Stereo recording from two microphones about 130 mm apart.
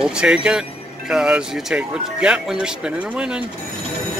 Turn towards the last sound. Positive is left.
turn(degrees=-10)  # may be behind; listen again after turning